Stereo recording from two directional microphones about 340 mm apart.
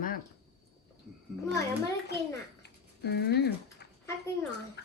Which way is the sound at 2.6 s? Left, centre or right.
Left.